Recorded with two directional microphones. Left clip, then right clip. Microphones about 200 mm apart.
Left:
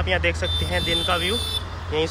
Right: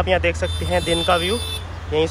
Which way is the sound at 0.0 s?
Centre (ahead or behind).